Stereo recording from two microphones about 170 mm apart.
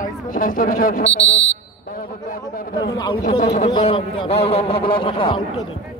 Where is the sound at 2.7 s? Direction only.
25° left (ahead or behind).